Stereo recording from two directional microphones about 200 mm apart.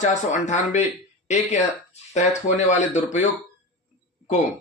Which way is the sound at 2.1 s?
35° left (ahead or behind).